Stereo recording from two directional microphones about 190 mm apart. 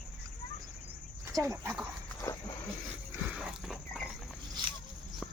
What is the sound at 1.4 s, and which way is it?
Speech, 15° right (ahead or behind).